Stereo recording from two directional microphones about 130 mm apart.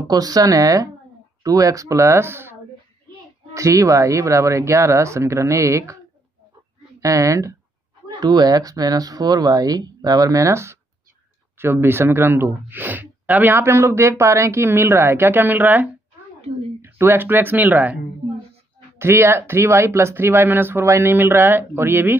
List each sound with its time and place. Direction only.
0.1 s speech: 30° right (ahead or behind)
3.5 s speech: 25° right (ahead or behind)
7.0 s speech: 25° right (ahead or behind)
18.9 s speech: 20° right (ahead or behind)